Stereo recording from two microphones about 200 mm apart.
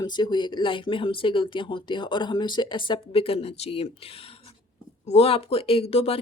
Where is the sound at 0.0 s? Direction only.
20° left (ahead or behind).